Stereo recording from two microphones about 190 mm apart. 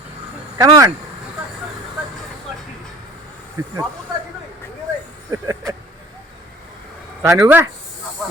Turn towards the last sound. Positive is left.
turn(degrees=-15)  # may be behind; listen again after turning